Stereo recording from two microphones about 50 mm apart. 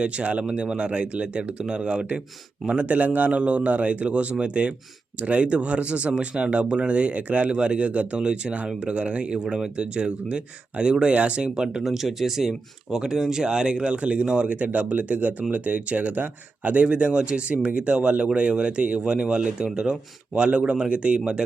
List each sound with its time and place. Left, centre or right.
0.0 s speech: right
11.8 s speech: centre